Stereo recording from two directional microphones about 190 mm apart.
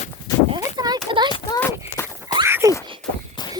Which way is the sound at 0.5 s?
20° right (ahead or behind).